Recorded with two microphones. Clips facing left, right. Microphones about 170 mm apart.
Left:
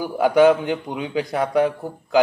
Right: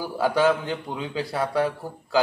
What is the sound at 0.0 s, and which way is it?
A man's voice, 20° left (ahead or behind).